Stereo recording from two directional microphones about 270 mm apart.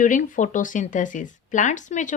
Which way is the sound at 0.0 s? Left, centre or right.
Left.